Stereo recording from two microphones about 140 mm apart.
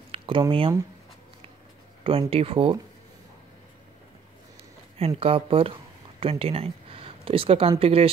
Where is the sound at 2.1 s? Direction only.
40° right (ahead or behind).